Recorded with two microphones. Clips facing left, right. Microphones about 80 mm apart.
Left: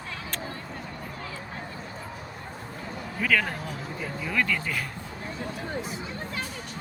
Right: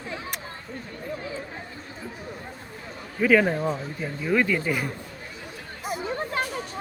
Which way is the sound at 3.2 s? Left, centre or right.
Centre.